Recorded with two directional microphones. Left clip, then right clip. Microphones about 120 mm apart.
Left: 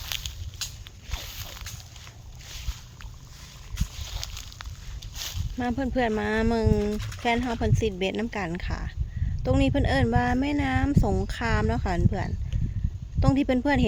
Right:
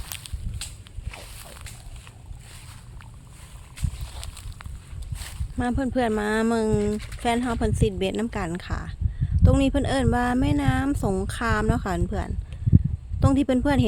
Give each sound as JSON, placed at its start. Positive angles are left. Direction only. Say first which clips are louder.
{"t": 0.0, "sound": "walk", "louder": "left 6 dB", "side_deg": 25}
{"t": 1.1, "sound": "a sound", "louder": "left 3 dB", "side_deg": 25}
{"t": 3.9, "sound": "a sound", "louder": "left 4 dB", "side_deg": 20}
{"t": 5.5, "sound": "speech", "louder": "right 2 dB", "side_deg": -35}
{"t": 6.9, "sound": "speech", "louder": "right 2 dB", "side_deg": 5}
{"t": 7.2, "sound": "speech", "louder": "right 1 dB", "side_deg": -40}